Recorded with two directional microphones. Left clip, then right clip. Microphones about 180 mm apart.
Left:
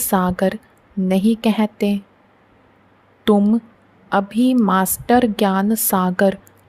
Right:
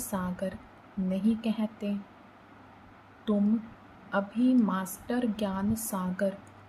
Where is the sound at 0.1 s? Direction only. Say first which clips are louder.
Left 17 dB; 60° left (ahead or behind).